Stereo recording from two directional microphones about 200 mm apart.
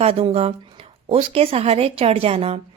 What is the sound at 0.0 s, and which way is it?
Speech, 30° right (ahead or behind).